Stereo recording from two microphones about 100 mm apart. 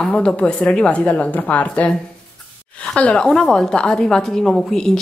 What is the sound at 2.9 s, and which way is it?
A woman's voice, 10° left (ahead or behind).